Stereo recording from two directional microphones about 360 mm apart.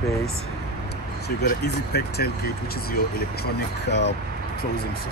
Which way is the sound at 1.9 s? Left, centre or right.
Left.